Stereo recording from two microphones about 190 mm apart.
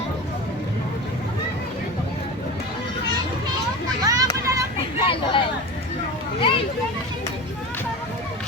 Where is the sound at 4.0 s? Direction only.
20° right (ahead or behind).